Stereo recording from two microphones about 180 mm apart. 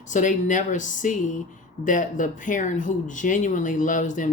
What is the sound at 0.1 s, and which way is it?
Speech, 45° left (ahead or behind).